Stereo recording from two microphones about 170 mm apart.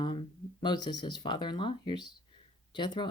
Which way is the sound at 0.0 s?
30° left (ahead or behind).